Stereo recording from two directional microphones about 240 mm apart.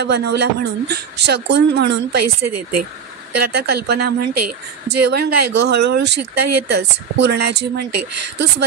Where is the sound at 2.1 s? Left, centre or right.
Right.